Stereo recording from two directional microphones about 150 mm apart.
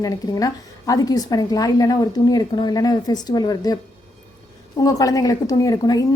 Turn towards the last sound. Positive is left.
turn(degrees=25)  # may be behind; listen again after turning